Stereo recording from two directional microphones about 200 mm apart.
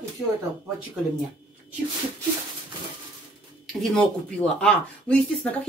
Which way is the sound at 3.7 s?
Centre (ahead or behind).